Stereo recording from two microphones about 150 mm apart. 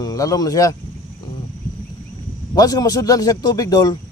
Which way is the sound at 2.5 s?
25° left (ahead or behind).